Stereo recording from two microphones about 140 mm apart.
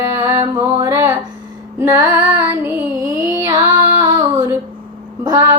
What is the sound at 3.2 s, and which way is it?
Child singing, 25° right (ahead or behind).